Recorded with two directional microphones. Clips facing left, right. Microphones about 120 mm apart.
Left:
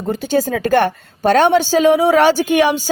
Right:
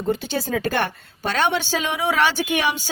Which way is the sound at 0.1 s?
45° left (ahead or behind).